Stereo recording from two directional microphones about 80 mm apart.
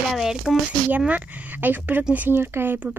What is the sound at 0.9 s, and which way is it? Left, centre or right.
Speech, right.